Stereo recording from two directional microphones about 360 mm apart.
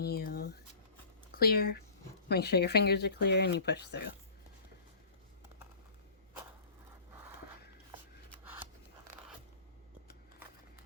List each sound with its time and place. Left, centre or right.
0.0 s a sound: left
1.3 s speech: left
8.6 s scissors: centre